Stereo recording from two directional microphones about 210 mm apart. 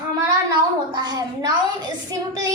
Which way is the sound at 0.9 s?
20° right (ahead or behind).